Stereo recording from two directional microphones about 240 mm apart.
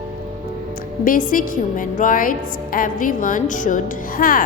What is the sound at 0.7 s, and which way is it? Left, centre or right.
A woman's voice, left.